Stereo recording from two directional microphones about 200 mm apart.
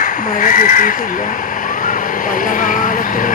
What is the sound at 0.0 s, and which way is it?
Speech, 40° left (ahead or behind).